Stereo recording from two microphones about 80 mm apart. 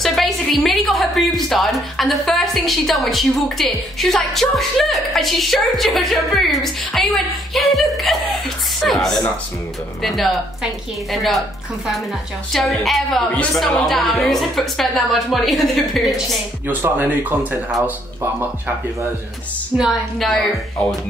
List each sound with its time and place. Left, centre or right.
0.0 s a woman's voice: centre
16.6 s speech: right
19.8 s a woman's voice: centre